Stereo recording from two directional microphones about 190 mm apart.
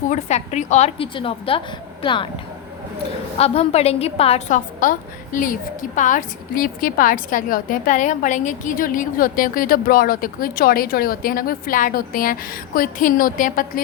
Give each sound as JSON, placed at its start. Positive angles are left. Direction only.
{"t": 0.1, "sound": "a woman's voice", "side_deg": 35}
{"t": 3.3, "sound": "a woman's voice", "side_deg": 30}